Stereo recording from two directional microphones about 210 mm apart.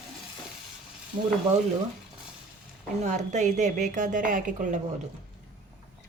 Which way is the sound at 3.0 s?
35° right (ahead or behind).